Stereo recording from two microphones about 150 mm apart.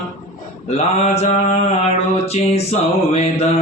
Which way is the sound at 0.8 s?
45° left (ahead or behind).